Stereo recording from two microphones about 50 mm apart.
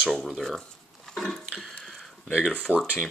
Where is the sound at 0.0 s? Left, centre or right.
Centre.